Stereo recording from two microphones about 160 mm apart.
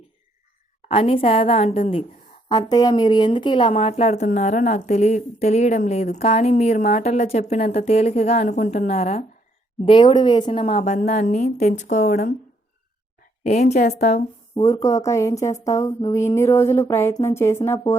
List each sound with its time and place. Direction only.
0.9 s a woman's voice: 35° left (ahead or behind)
2.5 s speech: 25° left (ahead or behind); by 4.2 s 40° left (ahead or behind)
4.2 s a woman's voice: 55° left (ahead or behind)
8.9 s a woman's voice: 40° left (ahead or behind)
9.8 s a woman's voice: 30° left (ahead or behind)
11.1 s a woman's voice: 50° left (ahead or behind)
13.4 s a woman's voice: 45° left (ahead or behind)
14.5 s a woman's voice: 20° left (ahead or behind)